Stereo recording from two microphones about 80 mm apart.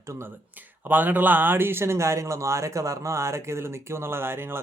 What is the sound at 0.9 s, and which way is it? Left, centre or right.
Speech, right.